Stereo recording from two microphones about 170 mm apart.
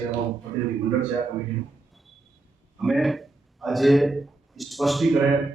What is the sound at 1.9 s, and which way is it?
Basketball bounce, centre (ahead or behind).